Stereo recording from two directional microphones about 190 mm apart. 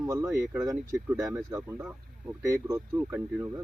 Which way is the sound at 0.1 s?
15° right (ahead or behind).